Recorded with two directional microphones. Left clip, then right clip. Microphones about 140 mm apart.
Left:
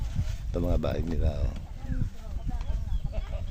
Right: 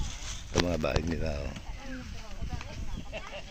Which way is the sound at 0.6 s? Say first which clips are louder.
Right 1 dB; 20° left (ahead or behind).